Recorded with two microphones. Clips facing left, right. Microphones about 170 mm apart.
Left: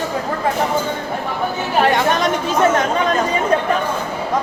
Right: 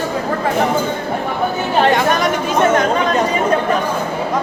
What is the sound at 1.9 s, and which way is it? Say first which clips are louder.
Speech: right 2 dB; 25° left (ahead or behind).